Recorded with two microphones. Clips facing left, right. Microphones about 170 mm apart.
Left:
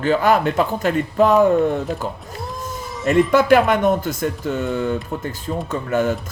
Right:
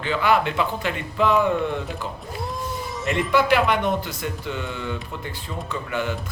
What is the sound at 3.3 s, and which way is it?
Speech, 45° left (ahead or behind).